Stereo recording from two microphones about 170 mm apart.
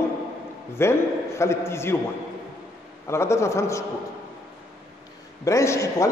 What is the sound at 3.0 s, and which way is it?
Speech, 15° left (ahead or behind).